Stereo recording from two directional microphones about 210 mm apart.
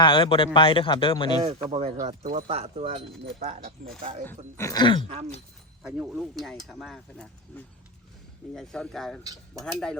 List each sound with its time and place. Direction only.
0.0 s a man's voice: 20° left (ahead or behind)
1.5 s speech: 30° right (ahead or behind)
3.8 s speech: 40° right (ahead or behind)
4.5 s a man's voice: 15° left (ahead or behind)
5.8 s speech: centre (ahead or behind)